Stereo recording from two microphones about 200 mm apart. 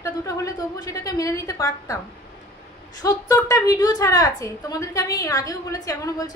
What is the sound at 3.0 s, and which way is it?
A woman's voice, 15° left (ahead or behind).